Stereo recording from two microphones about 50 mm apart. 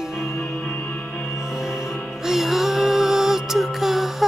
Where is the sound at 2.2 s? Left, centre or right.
Centre.